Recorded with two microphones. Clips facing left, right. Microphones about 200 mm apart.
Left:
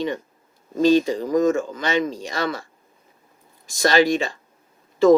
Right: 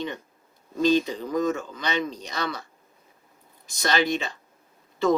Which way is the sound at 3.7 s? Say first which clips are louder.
Left 7 dB; 45° left (ahead or behind).